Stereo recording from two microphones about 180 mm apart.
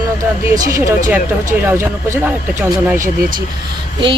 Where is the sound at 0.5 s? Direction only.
15° right (ahead or behind).